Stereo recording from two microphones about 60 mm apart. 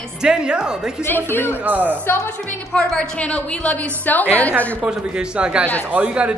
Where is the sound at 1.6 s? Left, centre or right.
Right.